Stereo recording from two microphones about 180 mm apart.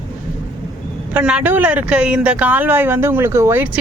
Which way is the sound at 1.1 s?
5° right (ahead or behind).